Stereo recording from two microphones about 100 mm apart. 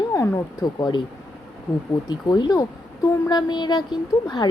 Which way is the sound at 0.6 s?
45° left (ahead or behind).